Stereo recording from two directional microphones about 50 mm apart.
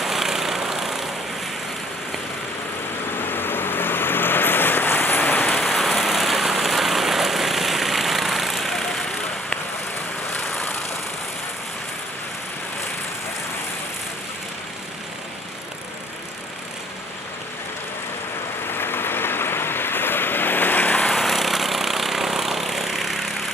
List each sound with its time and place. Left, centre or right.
0.0 s vehicle: centre
3.2 s vehicle: left
5.5 s vehicle: centre
18.7 s vehicle: left
21.1 s lawn mower: centre